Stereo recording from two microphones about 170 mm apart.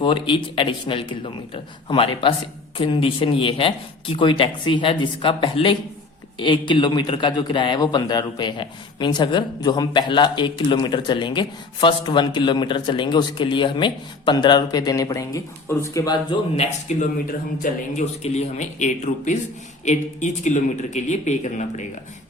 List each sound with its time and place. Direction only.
0.0 s a man's voice: 30° left (ahead or behind)
16.9 s speech: 45° left (ahead or behind)